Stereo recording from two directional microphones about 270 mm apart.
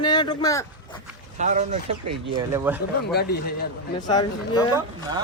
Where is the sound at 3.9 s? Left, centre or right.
Centre.